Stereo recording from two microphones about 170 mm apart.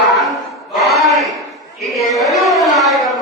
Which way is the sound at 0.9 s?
Centre (ahead or behind).